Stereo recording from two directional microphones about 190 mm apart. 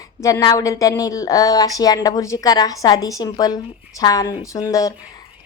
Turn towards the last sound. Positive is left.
turn(degrees=15)  # may be behind; listen again after turning